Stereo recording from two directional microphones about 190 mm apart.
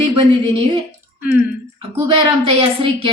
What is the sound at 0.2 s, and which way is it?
Speech, 25° right (ahead or behind).